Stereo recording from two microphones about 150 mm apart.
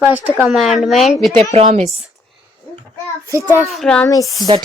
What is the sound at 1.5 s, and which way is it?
Speech, 50° right (ahead or behind).